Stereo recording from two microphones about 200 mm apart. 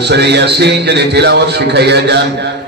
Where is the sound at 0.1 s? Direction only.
55° right (ahead or behind).